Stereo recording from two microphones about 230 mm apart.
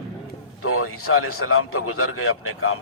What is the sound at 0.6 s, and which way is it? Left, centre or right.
A man's voice, left.